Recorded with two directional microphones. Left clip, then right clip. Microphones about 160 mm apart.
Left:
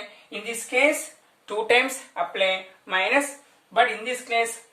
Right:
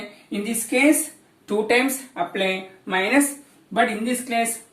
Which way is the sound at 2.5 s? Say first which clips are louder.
Right 1 dB; 15° left (ahead or behind).